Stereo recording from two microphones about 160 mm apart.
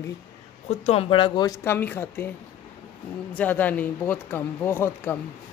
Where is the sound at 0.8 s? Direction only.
35° left (ahead or behind); by 2.3 s 10° left (ahead or behind).